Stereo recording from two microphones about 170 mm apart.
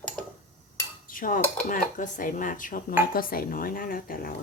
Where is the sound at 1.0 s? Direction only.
55° left (ahead or behind).